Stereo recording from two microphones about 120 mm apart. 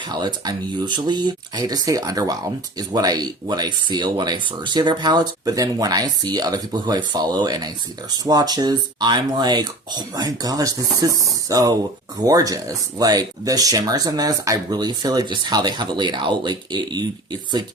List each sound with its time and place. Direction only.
0.1 s speech: 35° right (ahead or behind)